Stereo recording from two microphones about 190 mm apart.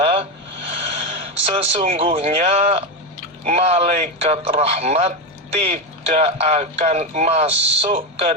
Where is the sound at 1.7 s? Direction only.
35° right (ahead or behind).